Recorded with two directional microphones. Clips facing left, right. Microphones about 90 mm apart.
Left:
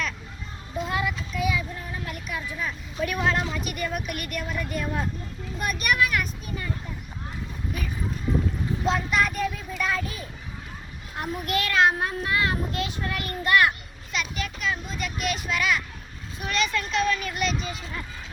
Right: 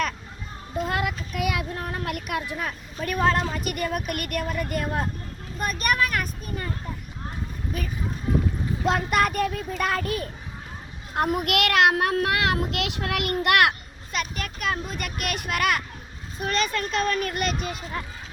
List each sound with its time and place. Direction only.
0.8 s a child's voice: 55° right (ahead or behind)
8.9 s a child's voice: 55° right (ahead or behind); by 13.7 s 75° right (ahead or behind)
14.1 s speech: 45° right (ahead or behind)
16.4 s speech: 45° right (ahead or behind)